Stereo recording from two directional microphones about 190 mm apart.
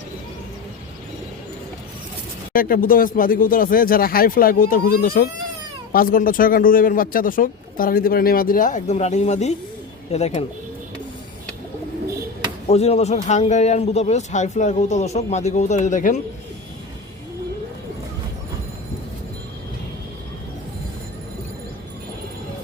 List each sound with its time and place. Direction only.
2.5 s speech: 50° left (ahead or behind)
12.6 s speech: 35° left (ahead or behind)